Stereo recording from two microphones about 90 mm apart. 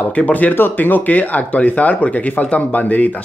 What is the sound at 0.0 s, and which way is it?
Speech, 15° left (ahead or behind).